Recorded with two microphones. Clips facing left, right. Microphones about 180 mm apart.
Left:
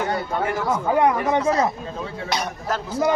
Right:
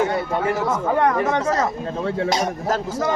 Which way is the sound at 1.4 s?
45° right (ahead or behind).